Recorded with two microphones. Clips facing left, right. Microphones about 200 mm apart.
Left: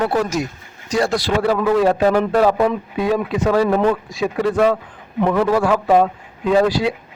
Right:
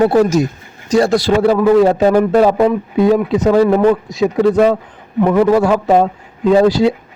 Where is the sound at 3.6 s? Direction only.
10° right (ahead or behind).